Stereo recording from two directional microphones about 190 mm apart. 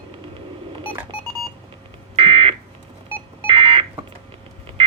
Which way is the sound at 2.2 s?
30° right (ahead or behind).